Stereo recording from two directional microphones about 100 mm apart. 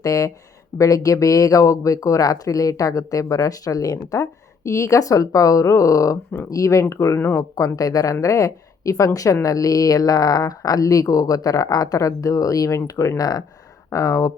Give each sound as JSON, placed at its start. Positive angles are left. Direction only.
{"t": 0.0, "sound": "speech", "side_deg": 35}